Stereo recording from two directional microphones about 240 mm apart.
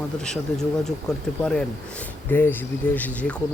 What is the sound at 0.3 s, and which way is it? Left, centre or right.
Speech, centre.